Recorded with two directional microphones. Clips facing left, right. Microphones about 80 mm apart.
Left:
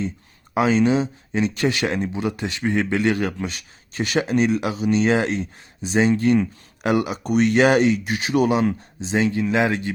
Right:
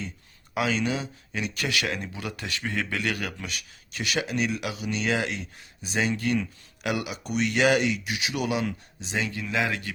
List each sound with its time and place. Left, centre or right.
0.5 s speech: left